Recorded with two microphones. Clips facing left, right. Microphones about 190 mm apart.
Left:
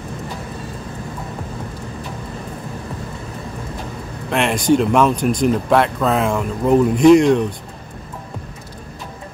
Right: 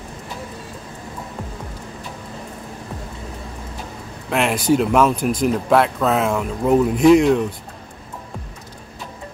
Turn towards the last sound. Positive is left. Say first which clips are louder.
# left 2 dB
turn(degrees=-5)  # may be behind; listen again after turning